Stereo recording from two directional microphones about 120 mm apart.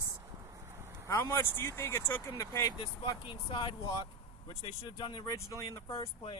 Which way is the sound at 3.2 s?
45° left (ahead or behind).